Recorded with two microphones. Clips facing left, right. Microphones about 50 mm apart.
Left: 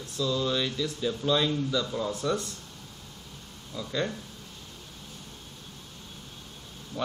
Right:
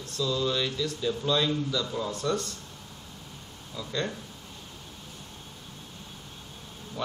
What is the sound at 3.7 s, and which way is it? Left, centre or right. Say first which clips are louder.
Speech: left 1 dB; centre.